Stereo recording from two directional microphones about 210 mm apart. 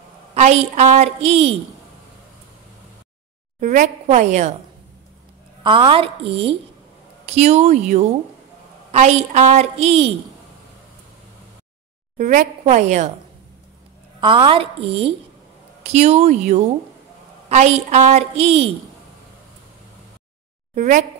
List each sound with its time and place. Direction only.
0.3 s a woman's voice: 30° right (ahead or behind)
3.6 s a woman's voice: 35° right (ahead or behind)
5.6 s a woman's voice: 25° right (ahead or behind)
12.2 s a woman's voice: 35° right (ahead or behind)
14.2 s a woman's voice: 25° right (ahead or behind)
20.7 s a woman's voice: 35° right (ahead or behind)